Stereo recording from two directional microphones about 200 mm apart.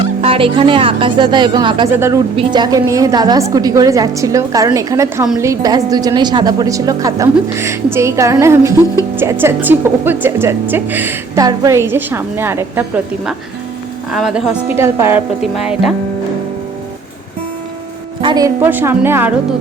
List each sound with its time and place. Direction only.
0.2 s speech: 25° right (ahead or behind)
2.0 s a woman's voice: 15° right (ahead or behind)
2.3 s a woman's voice: 25° right (ahead or behind)
14.1 s a woman's voice: 5° right (ahead or behind)
18.2 s a woman's voice: 20° right (ahead or behind)